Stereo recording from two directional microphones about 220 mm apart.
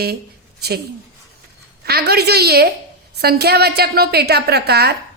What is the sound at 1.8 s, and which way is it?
A woman's voice, 45° right (ahead or behind).